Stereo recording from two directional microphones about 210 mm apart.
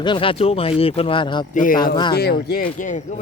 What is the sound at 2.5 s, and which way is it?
Speech, 40° left (ahead or behind).